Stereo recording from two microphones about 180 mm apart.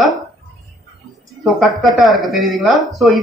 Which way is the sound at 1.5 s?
Centre (ahead or behind).